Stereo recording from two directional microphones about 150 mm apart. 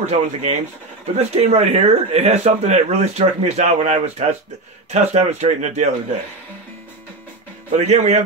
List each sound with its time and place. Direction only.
0.0 s speech: 50° right (ahead or behind)
7.7 s speech: 50° right (ahead or behind)